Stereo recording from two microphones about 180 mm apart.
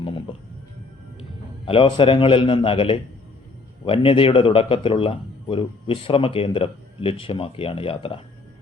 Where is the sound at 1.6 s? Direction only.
30° left (ahead or behind).